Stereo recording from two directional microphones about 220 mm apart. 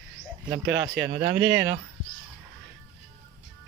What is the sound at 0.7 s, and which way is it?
Speech, 55° right (ahead or behind).